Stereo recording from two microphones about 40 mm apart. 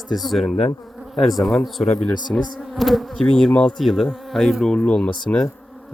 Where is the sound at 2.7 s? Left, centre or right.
Centre.